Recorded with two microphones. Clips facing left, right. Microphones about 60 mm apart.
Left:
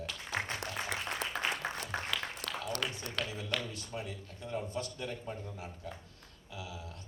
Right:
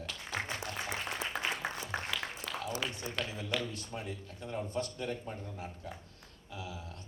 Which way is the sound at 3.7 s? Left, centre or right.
Right.